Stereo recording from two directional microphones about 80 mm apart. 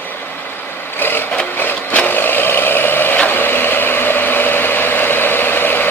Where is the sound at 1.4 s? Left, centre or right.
Centre.